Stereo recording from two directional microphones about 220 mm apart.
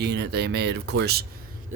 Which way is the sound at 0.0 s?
50° right (ahead or behind).